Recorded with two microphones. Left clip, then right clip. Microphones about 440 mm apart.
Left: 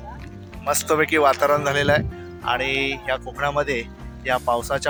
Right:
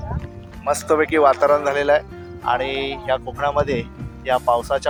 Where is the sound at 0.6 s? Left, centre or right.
Left.